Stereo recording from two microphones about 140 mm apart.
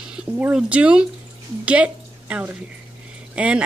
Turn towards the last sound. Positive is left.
turn(degrees=-10)  # may be behind; listen again after turning